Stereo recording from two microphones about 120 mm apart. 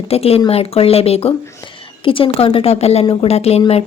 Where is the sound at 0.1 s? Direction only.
55° left (ahead or behind).